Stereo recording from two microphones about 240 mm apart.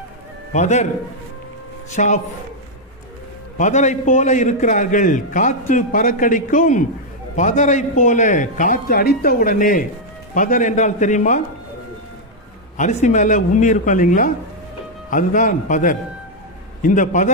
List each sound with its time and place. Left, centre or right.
0.5 s a man's voice: left
1.9 s a man's voice: left
3.5 s a man's voice: left
13.0 s a man's voice: left